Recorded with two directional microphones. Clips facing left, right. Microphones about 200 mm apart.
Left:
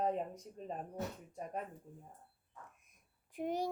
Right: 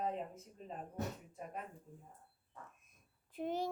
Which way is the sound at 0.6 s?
50° left (ahead or behind).